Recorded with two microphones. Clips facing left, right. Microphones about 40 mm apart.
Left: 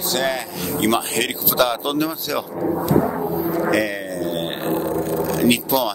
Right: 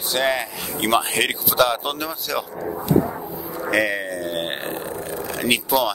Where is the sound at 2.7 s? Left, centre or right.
Centre.